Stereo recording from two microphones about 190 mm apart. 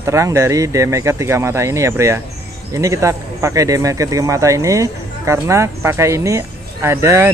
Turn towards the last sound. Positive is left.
turn(degrees=-15)  # may be behind; listen again after turning